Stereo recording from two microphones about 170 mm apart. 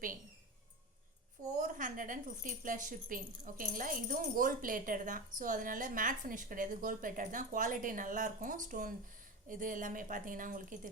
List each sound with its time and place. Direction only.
1.5 s speech: 50° right (ahead or behind)